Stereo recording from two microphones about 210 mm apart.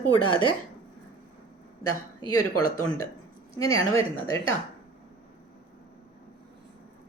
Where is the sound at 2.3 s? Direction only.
90° left.